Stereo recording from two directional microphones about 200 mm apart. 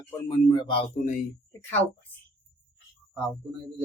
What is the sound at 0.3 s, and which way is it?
Speech, 20° left (ahead or behind).